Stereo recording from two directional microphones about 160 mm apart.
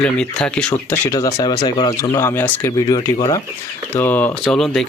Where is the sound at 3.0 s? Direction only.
25° left (ahead or behind).